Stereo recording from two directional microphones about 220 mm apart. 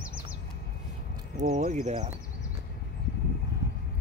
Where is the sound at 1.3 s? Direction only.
35° right (ahead or behind).